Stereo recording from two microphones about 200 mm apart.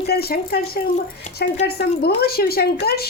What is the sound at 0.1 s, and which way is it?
Speech, 50° left (ahead or behind).